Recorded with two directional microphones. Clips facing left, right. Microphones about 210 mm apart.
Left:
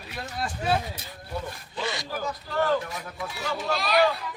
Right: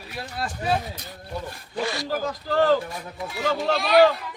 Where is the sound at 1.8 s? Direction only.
20° left (ahead or behind).